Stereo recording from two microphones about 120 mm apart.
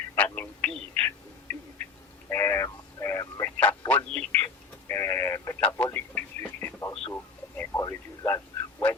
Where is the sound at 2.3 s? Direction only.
20° left (ahead or behind).